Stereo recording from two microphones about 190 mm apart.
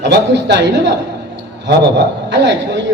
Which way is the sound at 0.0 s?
65° right (ahead or behind).